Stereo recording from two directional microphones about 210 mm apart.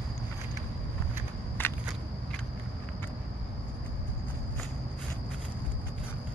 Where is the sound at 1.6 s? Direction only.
10° left (ahead or behind).